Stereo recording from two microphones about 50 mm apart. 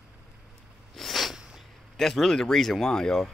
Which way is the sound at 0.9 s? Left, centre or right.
Centre.